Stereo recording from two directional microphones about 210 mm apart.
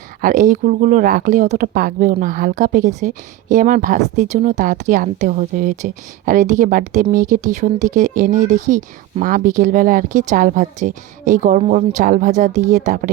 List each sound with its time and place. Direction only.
0.2 s speech: 40° right (ahead or behind)